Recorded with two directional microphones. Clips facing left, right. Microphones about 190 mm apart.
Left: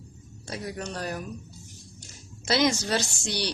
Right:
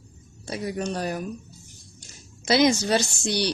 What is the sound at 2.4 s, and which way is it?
A woman's voice, 15° right (ahead or behind).